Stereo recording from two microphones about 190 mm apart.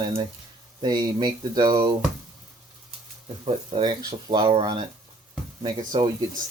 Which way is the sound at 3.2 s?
30° right (ahead or behind).